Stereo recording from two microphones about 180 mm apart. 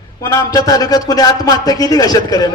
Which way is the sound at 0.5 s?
20° left (ahead or behind).